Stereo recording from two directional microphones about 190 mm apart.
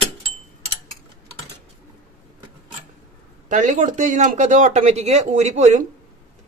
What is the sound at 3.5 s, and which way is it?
Speech, 40° right (ahead or behind).